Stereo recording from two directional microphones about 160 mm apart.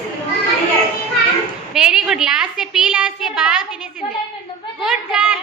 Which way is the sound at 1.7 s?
5° right (ahead or behind).